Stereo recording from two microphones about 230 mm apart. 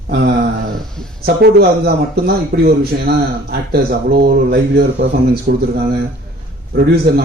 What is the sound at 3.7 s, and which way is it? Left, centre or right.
Speech, right.